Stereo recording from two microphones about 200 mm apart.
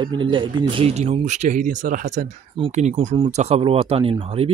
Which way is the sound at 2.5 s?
30° right (ahead or behind).